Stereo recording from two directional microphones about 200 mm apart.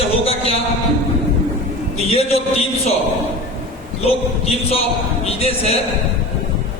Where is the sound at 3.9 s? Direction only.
30° left (ahead or behind).